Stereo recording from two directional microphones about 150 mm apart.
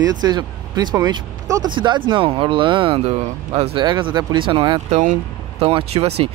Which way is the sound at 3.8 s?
30° right (ahead or behind).